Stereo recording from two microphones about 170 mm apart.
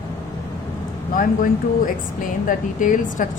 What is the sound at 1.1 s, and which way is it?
Speech, 55° left (ahead or behind).